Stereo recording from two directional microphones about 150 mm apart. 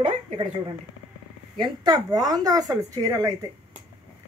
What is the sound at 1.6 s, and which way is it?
Speech, 25° right (ahead or behind).